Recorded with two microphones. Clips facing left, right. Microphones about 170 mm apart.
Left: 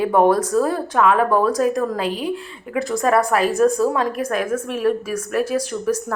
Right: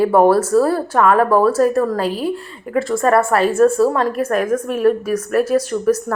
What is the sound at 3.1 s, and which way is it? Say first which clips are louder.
Speech: right 2 dB; 10° left (ahead or behind).